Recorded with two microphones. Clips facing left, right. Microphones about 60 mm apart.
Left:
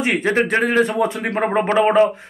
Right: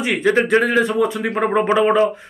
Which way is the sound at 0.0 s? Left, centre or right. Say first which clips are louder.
Right 1 dB; left.